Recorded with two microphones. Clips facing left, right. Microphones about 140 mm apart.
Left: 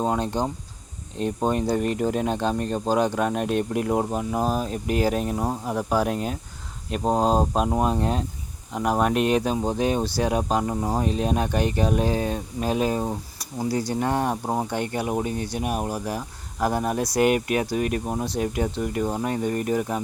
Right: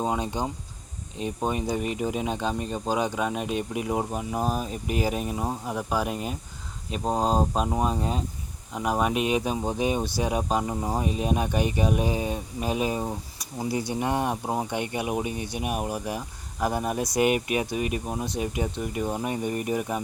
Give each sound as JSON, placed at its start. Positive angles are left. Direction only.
{"t": 0.0, "sound": "speech", "side_deg": -5}
{"t": 11.0, "sound": "speech", "side_deg": -5}
{"t": 13.7, "sound": "speech", "side_deg": -20}
{"t": 13.9, "sound": "speech", "side_deg": -10}